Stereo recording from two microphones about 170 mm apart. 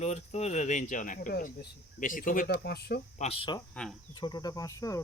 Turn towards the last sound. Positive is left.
turn(degrees=20)  # may be behind; listen again after turning